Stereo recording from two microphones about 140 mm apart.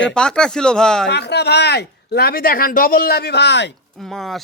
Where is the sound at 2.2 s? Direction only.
90° left.